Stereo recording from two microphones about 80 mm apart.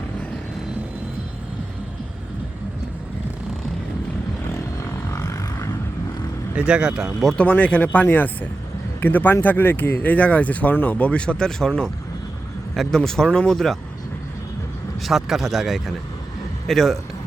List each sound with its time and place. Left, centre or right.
5.1 s vehicle: left
6.6 s speech: centre
7.3 s speech: centre
15.0 s speech: centre